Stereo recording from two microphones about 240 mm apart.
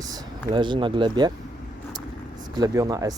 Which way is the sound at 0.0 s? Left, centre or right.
Centre.